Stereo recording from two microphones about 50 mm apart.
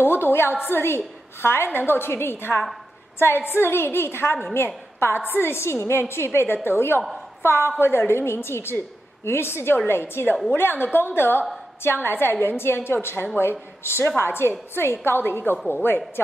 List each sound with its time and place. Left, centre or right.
0.0 s a woman's voice: left